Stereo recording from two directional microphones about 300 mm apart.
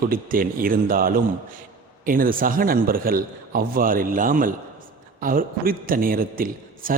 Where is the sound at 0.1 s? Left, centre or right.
Right.